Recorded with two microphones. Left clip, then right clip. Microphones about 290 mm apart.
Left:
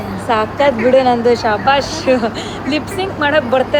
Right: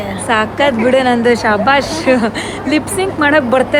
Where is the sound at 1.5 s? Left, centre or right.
Right.